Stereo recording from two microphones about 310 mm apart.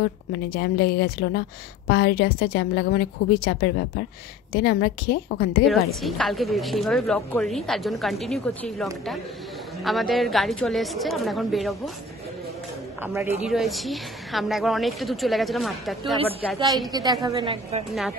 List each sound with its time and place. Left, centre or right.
0.0 s a woman's voice: left
5.7 s speech: centre
13.0 s speech: centre
16.9 s a woman's voice: centre